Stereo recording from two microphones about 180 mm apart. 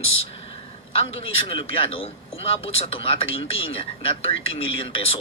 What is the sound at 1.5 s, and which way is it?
Speech, 30° left (ahead or behind).